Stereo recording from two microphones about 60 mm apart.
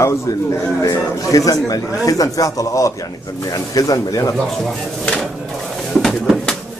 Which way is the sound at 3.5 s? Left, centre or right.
Left.